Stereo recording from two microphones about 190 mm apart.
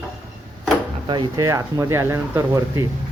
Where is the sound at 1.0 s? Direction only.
25° right (ahead or behind).